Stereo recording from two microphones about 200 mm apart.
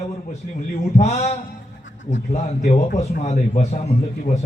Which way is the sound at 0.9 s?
35° left (ahead or behind).